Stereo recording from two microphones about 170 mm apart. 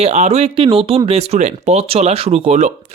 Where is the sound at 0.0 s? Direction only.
40° right (ahead or behind).